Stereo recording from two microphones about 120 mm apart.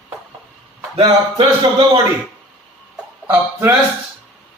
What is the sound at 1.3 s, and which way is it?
Speech, 50° right (ahead or behind).